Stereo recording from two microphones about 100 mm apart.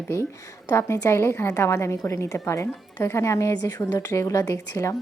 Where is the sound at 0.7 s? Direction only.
25° left (ahead or behind).